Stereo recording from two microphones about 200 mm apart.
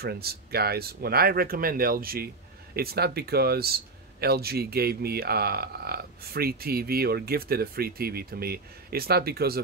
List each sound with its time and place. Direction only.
0.0 s speech: 50° right (ahead or behind)